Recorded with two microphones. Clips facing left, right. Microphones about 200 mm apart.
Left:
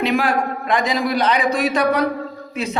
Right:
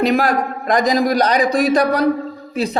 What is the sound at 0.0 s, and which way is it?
A man's voice, 40° right (ahead or behind).